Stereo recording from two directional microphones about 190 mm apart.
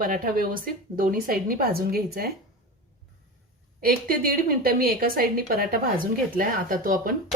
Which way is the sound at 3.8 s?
50° right (ahead or behind).